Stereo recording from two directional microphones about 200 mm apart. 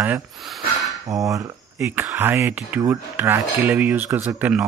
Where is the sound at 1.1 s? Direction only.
15° right (ahead or behind).